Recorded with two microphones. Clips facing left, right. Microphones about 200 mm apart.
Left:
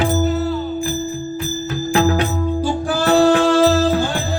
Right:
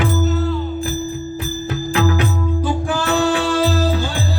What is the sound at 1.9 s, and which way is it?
Music, 40° left (ahead or behind).